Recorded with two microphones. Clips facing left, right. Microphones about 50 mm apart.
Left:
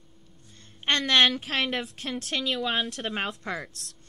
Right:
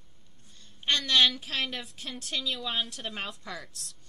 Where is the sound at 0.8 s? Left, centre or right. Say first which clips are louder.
Left 3 dB; left.